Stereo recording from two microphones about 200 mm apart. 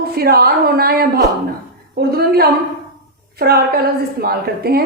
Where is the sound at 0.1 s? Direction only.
50° right (ahead or behind).